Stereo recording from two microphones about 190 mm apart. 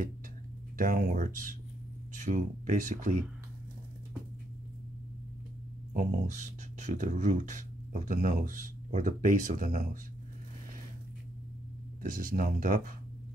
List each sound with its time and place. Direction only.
0.7 s speech: 50° right (ahead or behind)
5.9 s speech: 40° right (ahead or behind)
12.0 s speech: 45° right (ahead or behind)